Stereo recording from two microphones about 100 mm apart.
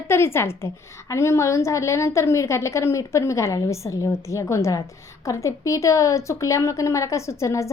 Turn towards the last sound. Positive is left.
turn(degrees=30)  # may be behind; listen again after turning